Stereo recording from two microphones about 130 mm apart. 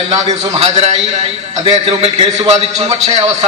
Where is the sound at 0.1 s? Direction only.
55° right (ahead or behind).